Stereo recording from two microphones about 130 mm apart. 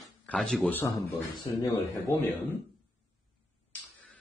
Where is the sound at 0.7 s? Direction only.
15° left (ahead or behind).